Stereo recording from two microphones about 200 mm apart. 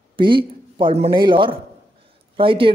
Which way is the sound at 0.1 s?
25° right (ahead or behind).